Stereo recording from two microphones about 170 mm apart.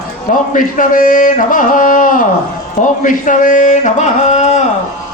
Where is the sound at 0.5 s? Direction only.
50° left (ahead or behind).